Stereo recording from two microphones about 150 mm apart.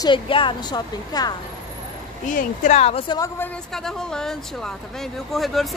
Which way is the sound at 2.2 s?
60° left (ahead or behind).